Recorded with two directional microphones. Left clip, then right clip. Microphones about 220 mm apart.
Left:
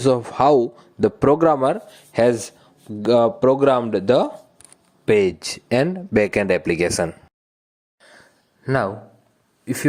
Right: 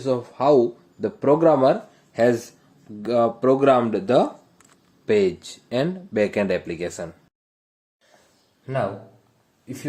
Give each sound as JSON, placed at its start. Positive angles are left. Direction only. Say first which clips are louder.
{"t": 0.0, "sound": "speech", "louder": "left 5 dB", "side_deg": 40}
{"t": 8.6, "sound": "speech", "louder": "left 4 dB", "side_deg": 35}